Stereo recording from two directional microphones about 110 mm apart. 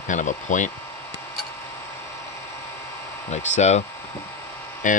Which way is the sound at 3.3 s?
90° left.